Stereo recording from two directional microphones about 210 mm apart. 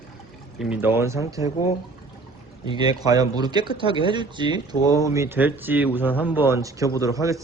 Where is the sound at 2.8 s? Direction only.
20° right (ahead or behind).